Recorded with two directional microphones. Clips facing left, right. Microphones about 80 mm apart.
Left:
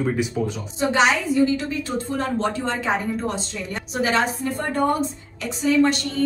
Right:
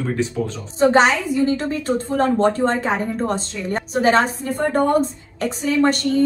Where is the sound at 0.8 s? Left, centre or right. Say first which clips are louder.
Right 5 dB; right.